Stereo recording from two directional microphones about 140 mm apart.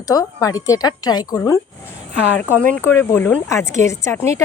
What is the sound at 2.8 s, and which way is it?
A woman's voice, 15° left (ahead or behind).